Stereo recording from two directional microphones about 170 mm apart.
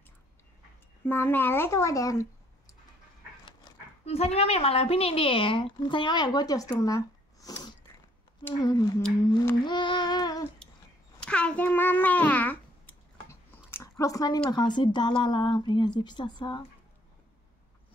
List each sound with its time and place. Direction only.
1.0 s speech: 10° left (ahead or behind)
4.0 s speech: 35° left (ahead or behind)
10.6 s a sound: 5° left (ahead or behind); by 14.4 s 20° left (ahead or behind)
14.5 s speech: 25° left (ahead or behind)